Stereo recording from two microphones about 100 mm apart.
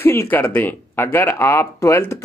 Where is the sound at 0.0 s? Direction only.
25° left (ahead or behind).